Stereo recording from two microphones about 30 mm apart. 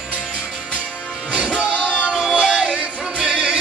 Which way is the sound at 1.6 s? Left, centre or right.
Right.